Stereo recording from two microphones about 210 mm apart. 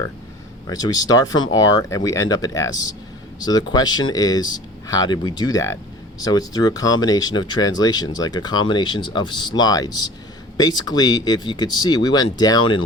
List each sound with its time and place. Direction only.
0.7 s speech: 20° left (ahead or behind)